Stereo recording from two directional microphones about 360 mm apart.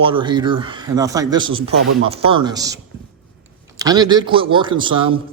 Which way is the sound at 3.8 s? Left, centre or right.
Centre.